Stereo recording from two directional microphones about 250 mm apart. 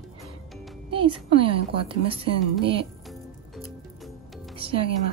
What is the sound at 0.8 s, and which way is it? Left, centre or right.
A woman's voice, right.